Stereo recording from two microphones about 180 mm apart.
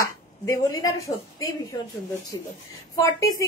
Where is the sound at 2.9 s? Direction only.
20° left (ahead or behind).